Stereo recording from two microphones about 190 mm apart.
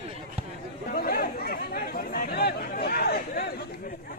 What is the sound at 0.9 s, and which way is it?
Chatter, 50° left (ahead or behind).